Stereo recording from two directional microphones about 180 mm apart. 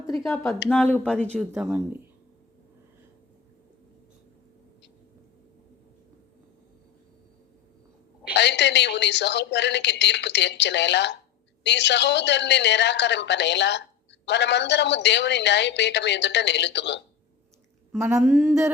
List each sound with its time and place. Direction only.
0.7 s speech: 10° left (ahead or behind)
8.3 s a woman's voice: 75° left (ahead or behind)
17.9 s speech: 10° right (ahead or behind)